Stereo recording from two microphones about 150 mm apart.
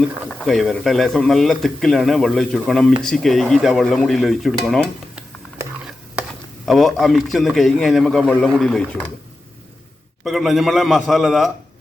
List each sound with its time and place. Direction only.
0.3 s speech: 5° left (ahead or behind)
6.7 s speech: centre (ahead or behind)
10.2 s speech: centre (ahead or behind)